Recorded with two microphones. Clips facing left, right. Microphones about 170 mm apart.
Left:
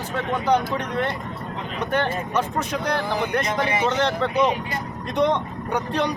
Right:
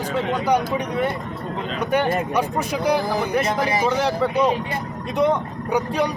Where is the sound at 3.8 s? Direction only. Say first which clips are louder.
Right 2 dB; 10° right (ahead or behind).